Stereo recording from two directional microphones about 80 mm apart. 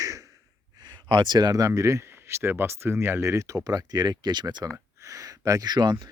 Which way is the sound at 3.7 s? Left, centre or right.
Right.